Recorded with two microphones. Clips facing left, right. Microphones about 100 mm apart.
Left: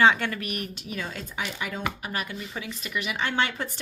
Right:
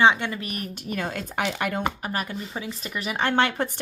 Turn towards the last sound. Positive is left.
turn(degrees=-50)  # may be behind; listen again after turning